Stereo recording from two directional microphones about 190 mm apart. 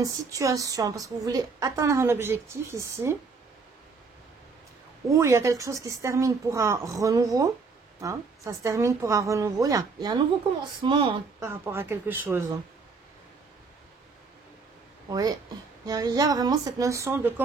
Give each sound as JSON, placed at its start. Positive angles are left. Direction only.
{"t": 0.0, "sound": "a woman's voice", "side_deg": -20}
{"t": 5.1, "sound": "a woman's voice", "side_deg": -15}
{"t": 11.4, "sound": "a woman's voice", "side_deg": -15}
{"t": 15.0, "sound": "speech", "side_deg": -20}